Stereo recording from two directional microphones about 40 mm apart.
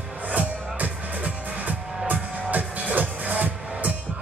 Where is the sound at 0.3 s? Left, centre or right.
Right.